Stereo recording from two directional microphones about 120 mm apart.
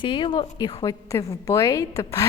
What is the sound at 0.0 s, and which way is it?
Speech, 40° left (ahead or behind).